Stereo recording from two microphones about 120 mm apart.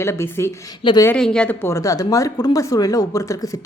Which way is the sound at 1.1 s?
5° left (ahead or behind).